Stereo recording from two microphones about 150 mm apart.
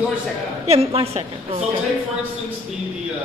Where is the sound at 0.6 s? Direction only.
45° right (ahead or behind).